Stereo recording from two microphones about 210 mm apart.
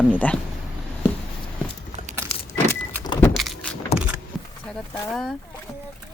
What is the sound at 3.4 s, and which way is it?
Vehicle, centre (ahead or behind).